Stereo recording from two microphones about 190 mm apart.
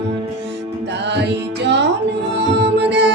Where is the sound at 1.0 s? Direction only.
65° right (ahead or behind).